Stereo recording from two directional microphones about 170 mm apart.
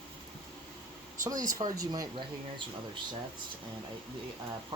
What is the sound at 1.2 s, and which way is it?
Speech, 20° right (ahead or behind).